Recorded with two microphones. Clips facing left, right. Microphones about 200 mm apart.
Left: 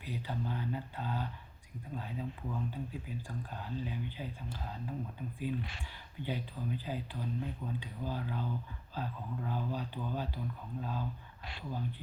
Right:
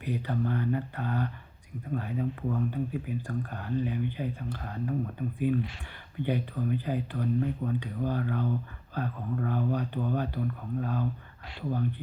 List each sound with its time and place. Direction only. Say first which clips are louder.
0.0 s speech: right 8 dB; 60° right (ahead or behind)